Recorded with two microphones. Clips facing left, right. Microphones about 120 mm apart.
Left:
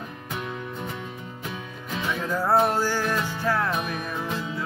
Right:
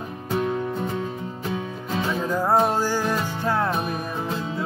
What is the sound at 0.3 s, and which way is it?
Music, 35° right (ahead or behind).